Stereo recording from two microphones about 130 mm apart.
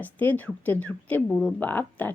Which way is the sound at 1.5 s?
15° left (ahead or behind).